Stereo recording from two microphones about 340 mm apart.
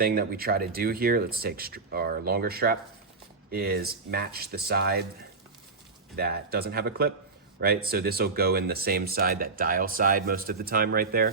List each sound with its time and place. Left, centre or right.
0.0 s speech: right
6.1 s speech: right